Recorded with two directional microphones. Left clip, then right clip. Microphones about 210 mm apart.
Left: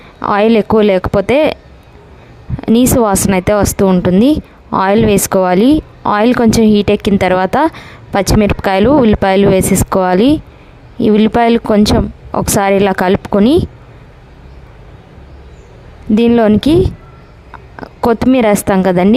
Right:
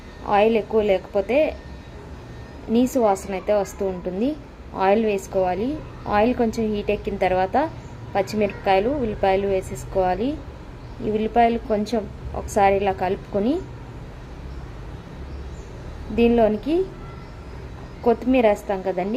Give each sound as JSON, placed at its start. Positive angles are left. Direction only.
{"t": 0.3, "sound": "speech", "side_deg": 50}
{"t": 2.7, "sound": "speech", "side_deg": 50}
{"t": 16.1, "sound": "speech", "side_deg": 50}
{"t": 18.1, "sound": "speech", "side_deg": 50}